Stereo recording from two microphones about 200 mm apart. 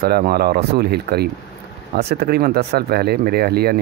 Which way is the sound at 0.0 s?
50° right (ahead or behind).